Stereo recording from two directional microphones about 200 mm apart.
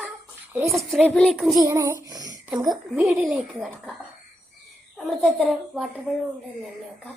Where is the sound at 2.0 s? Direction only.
20° right (ahead or behind).